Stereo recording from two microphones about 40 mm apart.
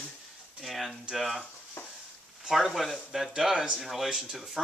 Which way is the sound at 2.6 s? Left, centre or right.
Centre.